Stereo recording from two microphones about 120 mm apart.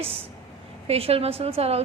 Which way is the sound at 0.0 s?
50° right (ahead or behind).